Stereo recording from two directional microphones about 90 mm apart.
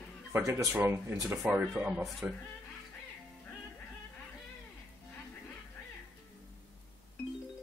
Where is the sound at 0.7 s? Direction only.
25° right (ahead or behind).